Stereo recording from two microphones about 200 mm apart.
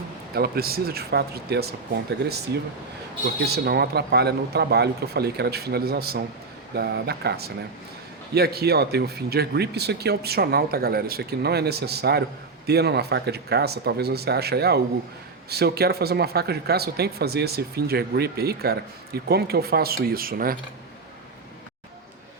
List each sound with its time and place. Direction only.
0.3 s speech: 50° right (ahead or behind)
3.4 s speech: 55° right (ahead or behind)